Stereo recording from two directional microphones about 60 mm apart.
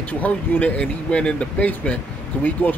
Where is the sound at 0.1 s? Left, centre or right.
Left.